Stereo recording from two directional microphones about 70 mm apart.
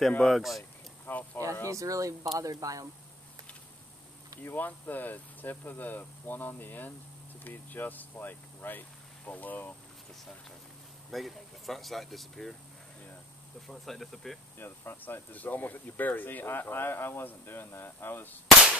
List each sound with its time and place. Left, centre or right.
0.2 s speech: centre
1.0 s a sound: left
1.7 s speech: right
4.4 s speech: left
11.1 s speech: centre
13.7 s speech: centre
14.6 s speech: left